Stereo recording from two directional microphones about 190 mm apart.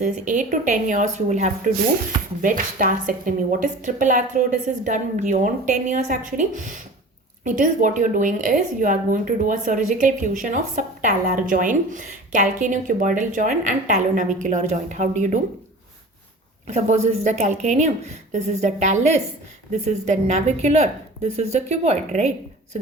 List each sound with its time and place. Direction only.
0.0 s a woman's voice: 40° right (ahead or behind)
16.6 s a woman's voice: 35° right (ahead or behind)